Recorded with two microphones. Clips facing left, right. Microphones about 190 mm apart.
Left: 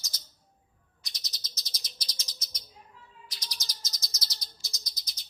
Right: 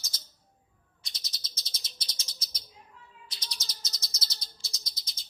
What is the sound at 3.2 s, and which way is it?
Chirp, 25° right (ahead or behind).